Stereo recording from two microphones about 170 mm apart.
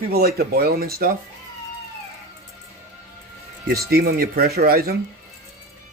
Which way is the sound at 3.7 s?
65° right (ahead or behind).